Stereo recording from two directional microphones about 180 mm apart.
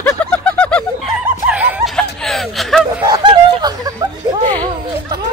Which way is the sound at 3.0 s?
20° right (ahead or behind).